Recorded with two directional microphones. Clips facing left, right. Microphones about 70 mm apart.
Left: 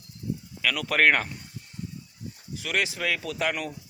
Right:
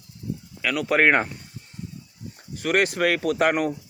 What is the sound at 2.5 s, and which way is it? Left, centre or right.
Speech, right.